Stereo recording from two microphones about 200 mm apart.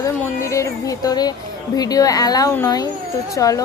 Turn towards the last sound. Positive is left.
turn(degrees=15)  # may be behind; listen again after turning